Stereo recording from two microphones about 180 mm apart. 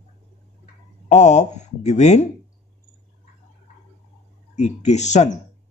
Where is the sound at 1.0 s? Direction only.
40° left (ahead or behind).